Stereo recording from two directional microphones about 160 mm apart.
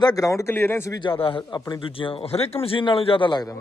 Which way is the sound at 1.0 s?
30° left (ahead or behind).